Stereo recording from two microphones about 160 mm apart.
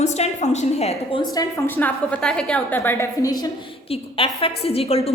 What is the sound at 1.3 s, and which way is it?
A woman's voice, 15° left (ahead or behind).